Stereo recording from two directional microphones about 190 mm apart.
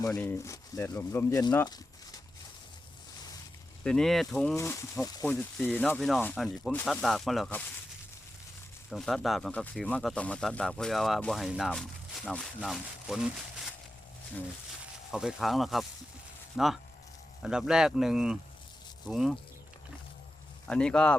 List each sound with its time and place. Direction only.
0.0 s speech: 15° left (ahead or behind)
3.8 s speech: centre (ahead or behind)
4.5 s speech: 15° left (ahead or behind)
8.9 s speech: centre (ahead or behind)
15.1 s speech: 5° right (ahead or behind)
20.7 s speech: 5° left (ahead or behind)